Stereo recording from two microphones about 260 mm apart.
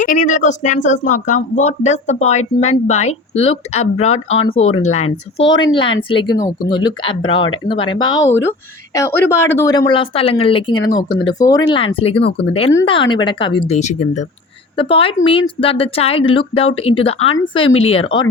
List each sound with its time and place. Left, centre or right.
0.0 s speech: left